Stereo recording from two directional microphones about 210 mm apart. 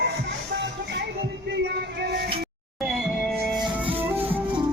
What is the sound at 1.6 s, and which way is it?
Music, 50° right (ahead or behind).